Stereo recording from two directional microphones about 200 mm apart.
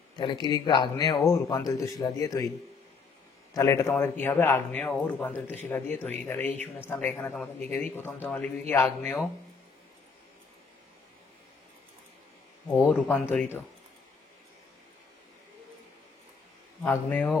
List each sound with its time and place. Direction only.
0.2 s a man's voice: 20° left (ahead or behind)
3.5 s a man's voice: 15° left (ahead or behind)
12.6 s speech: 5° left (ahead or behind)
16.8 s a man's voice: 10° left (ahead or behind)